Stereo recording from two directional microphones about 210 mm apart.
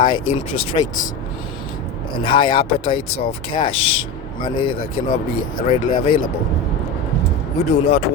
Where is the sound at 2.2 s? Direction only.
25° left (ahead or behind).